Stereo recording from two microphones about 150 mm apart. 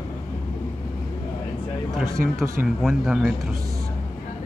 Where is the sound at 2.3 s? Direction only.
Centre (ahead or behind).